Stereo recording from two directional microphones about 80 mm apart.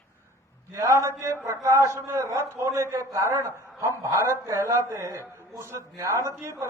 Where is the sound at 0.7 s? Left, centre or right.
Right.